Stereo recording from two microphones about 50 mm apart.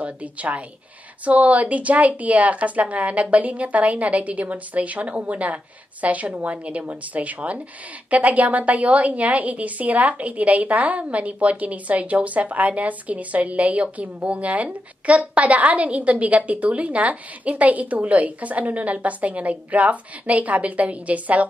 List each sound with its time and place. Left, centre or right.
0.0 s a woman's voice: right